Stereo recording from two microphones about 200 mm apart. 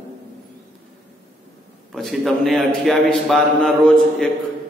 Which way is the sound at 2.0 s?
Centre (ahead or behind).